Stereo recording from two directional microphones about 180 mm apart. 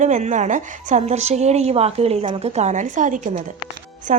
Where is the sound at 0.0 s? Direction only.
40° right (ahead or behind).